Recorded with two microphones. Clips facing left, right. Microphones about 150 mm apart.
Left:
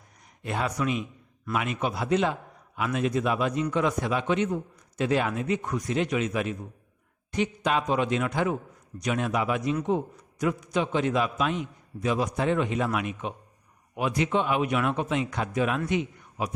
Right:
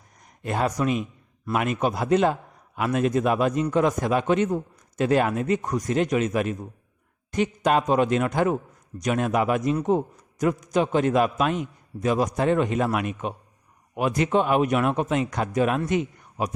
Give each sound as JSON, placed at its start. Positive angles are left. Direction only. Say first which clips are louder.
{"t": 0.4, "sound": "a man's voice", "louder": "right 4 dB", "side_deg": -45}